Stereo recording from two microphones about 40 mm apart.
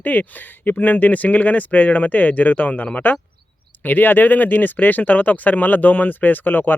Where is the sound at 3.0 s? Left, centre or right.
Left.